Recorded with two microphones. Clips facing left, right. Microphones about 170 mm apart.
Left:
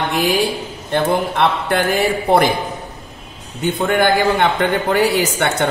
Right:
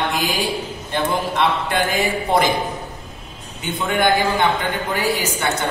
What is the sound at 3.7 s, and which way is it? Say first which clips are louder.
Speech: left 2 dB; 60° left (ahead or behind).